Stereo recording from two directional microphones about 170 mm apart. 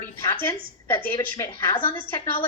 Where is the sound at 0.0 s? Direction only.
15° left (ahead or behind).